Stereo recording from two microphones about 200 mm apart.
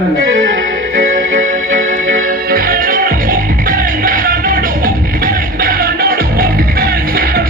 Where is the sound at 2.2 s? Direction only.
45° right (ahead or behind).